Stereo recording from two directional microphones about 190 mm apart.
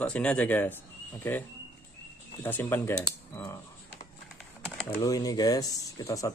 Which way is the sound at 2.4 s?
10° left (ahead or behind).